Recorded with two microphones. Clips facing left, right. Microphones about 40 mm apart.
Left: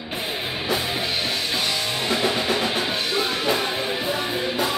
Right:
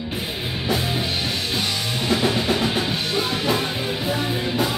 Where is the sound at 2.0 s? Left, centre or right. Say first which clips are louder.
Right 2 dB; centre.